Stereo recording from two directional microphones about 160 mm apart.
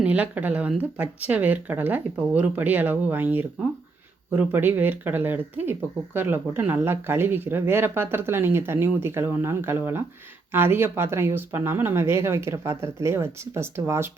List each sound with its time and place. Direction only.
0.0 s speech: 10° right (ahead or behind)